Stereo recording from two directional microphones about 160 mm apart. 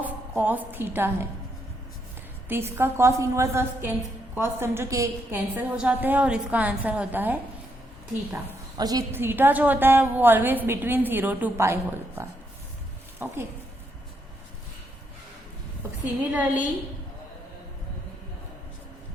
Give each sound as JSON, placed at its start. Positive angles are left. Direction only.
{"t": 0.0, "sound": "a woman's voice", "side_deg": -10}
{"t": 2.5, "sound": "a woman's voice", "side_deg": -15}
{"t": 8.8, "sound": "a woman's voice", "side_deg": -25}
{"t": 16.3, "sound": "a woman's voice", "side_deg": -10}